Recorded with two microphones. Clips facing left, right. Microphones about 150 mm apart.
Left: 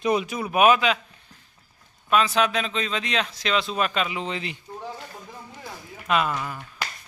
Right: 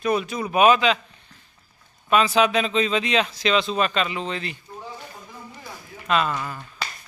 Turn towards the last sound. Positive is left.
turn(degrees=5)  # may be behind; listen again after turning